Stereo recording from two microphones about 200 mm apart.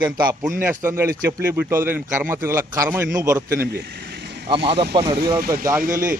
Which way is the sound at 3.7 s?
55° right (ahead or behind).